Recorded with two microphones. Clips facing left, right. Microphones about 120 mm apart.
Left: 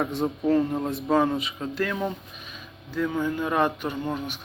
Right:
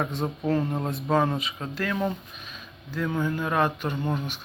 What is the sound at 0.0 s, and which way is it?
Speech, 5° left (ahead or behind).